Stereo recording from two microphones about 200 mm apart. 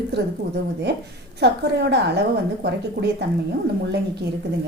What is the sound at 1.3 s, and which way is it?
Speech, 55° right (ahead or behind).